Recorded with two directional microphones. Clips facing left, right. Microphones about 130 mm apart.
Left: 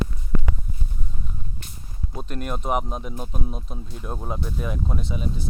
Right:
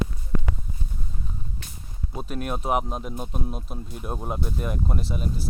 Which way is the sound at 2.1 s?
5° right (ahead or behind).